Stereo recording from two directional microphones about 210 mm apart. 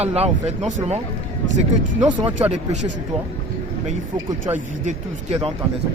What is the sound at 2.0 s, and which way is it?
Speech, 30° right (ahead or behind).